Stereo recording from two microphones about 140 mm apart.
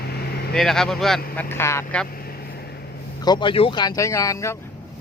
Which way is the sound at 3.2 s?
30° left (ahead or behind).